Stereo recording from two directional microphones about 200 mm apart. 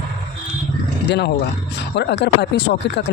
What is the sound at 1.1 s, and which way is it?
Speech, 55° left (ahead or behind).